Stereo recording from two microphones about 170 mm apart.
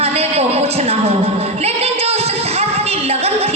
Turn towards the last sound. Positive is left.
turn(degrees=-35)  # may be behind; listen again after turning